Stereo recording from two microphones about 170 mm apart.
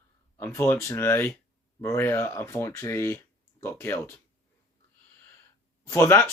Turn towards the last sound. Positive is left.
turn(degrees=15)  # may be behind; listen again after turning